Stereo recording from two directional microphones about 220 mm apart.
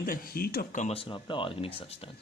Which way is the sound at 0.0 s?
40° left (ahead or behind).